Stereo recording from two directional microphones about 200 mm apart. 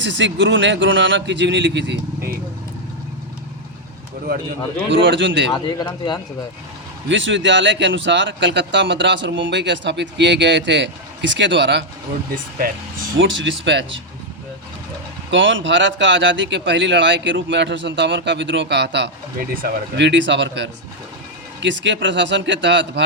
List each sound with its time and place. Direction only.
0.0 s speech: 65° right (ahead or behind)
4.9 s speech: 65° right (ahead or behind)
5.5 s speech: 25° left (ahead or behind)
7.1 s speech: 70° right (ahead or behind)
13.1 s speech: 70° right (ahead or behind)
15.3 s speech: 70° right (ahead or behind)